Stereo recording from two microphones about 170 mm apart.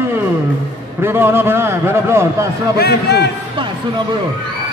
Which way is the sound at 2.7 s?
70° left (ahead or behind).